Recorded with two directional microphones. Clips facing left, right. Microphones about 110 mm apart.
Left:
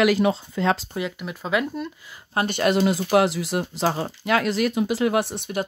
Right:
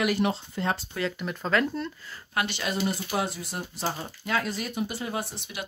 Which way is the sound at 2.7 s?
90° left.